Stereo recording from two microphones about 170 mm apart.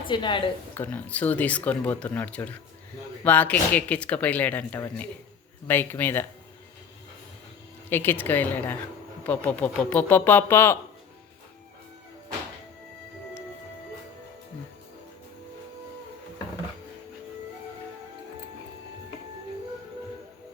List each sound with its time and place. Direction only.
0.1 s a woman's voice: 30° left (ahead or behind)
0.7 s speech: 10° left (ahead or behind)
7.9 s speech: 10° left (ahead or behind)